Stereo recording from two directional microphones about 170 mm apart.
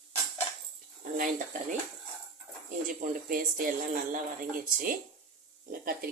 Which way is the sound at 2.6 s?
50° right (ahead or behind).